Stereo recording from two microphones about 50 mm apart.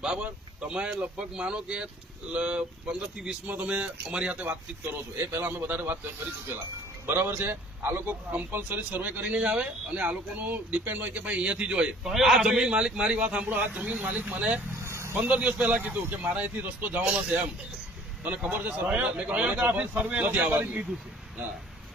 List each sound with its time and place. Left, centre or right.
0.0 s a man's voice: centre
3.5 s a man's voice: right
4.4 s speech: right
7.1 s a man's voice: right; by 12.1 s centre
12.1 s a man's voice: centre; by 14.6 s right
14.8 s vehicle: right
15.2 s a man's voice: right